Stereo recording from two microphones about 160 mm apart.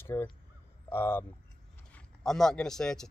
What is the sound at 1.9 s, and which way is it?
Speech, 5° left (ahead or behind).